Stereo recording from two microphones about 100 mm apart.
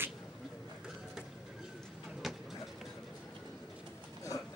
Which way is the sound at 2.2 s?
Centre (ahead or behind).